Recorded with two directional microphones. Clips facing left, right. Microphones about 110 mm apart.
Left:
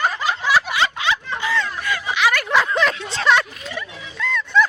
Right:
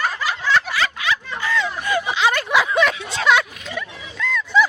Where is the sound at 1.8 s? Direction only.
25° right (ahead or behind).